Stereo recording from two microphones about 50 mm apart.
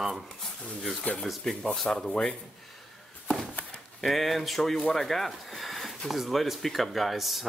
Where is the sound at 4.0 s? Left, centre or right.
Centre.